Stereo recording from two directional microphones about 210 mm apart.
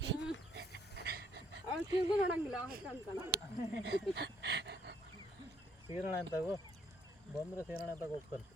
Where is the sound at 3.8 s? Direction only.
55° right (ahead or behind).